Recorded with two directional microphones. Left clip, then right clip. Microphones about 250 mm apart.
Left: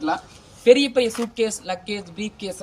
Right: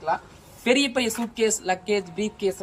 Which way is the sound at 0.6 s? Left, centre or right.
Centre.